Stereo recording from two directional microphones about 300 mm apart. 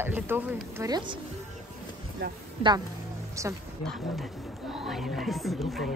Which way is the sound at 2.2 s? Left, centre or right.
Right.